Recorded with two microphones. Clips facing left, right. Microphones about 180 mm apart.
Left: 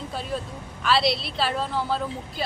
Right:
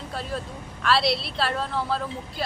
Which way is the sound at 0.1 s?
Centre (ahead or behind).